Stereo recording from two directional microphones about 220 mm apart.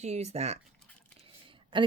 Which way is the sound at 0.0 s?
30° right (ahead or behind).